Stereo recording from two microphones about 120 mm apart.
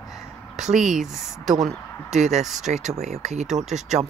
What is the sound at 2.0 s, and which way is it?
Speech, 75° right (ahead or behind).